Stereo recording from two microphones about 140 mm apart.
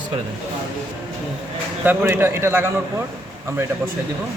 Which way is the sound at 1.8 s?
15° right (ahead or behind).